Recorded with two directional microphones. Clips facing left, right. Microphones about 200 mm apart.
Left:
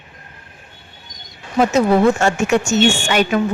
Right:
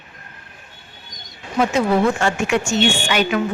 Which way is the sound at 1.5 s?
40° left (ahead or behind).